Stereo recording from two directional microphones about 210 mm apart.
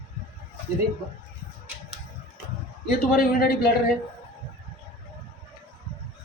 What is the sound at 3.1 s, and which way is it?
Speech, 45° left (ahead or behind).